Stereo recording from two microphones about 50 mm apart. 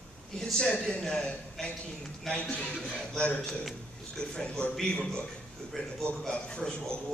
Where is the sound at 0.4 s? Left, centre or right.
Centre.